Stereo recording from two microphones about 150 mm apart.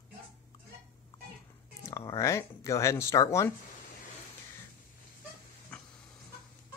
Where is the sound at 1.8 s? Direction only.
20° left (ahead or behind).